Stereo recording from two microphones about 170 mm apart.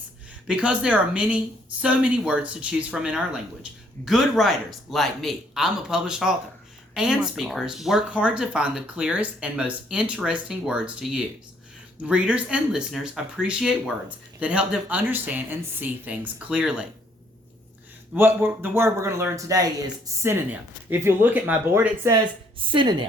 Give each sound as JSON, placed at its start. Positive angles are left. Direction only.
{"t": 0.4, "sound": "speech", "side_deg": -5}
{"t": 12.0, "sound": "speech", "side_deg": -5}
{"t": 18.1, "sound": "speech", "side_deg": -10}
{"t": 22.6, "sound": "a woman's voice", "side_deg": -30}